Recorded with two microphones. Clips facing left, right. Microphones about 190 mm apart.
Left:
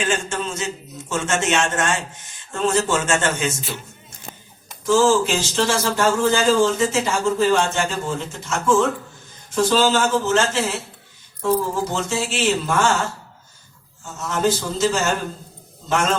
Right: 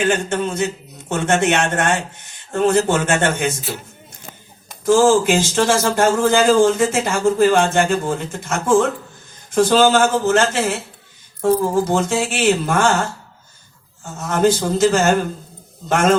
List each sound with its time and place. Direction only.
0.0 s speech: 60° right (ahead or behind)
4.9 s speech: 55° right (ahead or behind)